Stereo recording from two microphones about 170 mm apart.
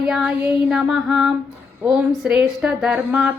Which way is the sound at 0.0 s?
5° right (ahead or behind).